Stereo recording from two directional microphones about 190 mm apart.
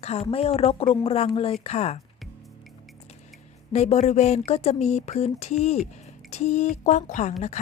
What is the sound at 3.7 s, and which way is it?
Speech, 35° left (ahead or behind).